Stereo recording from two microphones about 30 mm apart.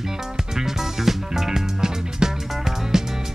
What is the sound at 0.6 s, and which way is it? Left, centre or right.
Music, centre.